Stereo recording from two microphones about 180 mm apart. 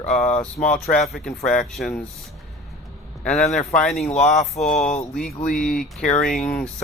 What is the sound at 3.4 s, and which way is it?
Speech, 35° left (ahead or behind).